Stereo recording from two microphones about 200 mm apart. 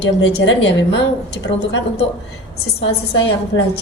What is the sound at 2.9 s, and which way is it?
Speech, 70° left (ahead or behind).